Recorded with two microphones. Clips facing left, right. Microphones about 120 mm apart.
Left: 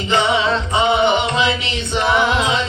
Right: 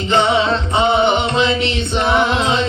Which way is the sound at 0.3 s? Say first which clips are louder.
Right 2 dB; 30° right (ahead or behind).